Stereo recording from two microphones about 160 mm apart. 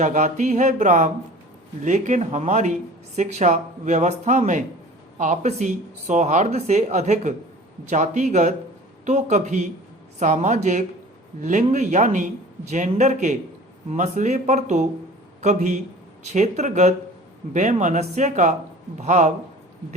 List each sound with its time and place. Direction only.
0.0 s speech: 50° right (ahead or behind)